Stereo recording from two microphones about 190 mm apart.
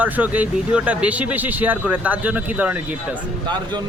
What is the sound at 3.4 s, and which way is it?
Speech, 25° right (ahead or behind).